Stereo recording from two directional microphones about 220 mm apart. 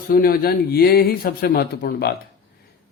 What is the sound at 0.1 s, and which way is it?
Speech, 40° left (ahead or behind).